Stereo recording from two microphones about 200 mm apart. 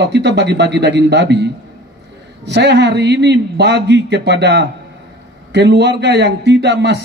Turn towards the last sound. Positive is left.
turn(degrees=-60)  # may be behind; listen again after turning